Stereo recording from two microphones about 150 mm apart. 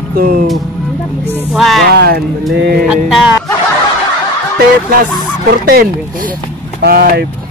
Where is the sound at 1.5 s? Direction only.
Centre (ahead or behind).